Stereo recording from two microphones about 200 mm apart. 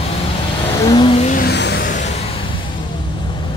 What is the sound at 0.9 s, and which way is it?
Vehicle, 25° left (ahead or behind).